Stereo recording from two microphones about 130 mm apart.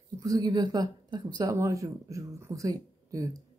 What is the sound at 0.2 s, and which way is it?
Speech, 30° right (ahead or behind).